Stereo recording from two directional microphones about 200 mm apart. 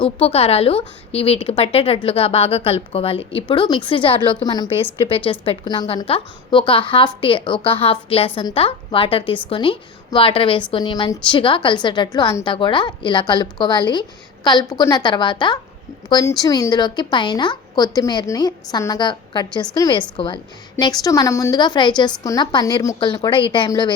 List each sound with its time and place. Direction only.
0.2 s a woman's voice: 30° left (ahead or behind)